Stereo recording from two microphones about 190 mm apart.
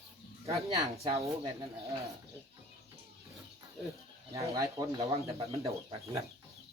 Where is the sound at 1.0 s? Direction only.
30° right (ahead or behind).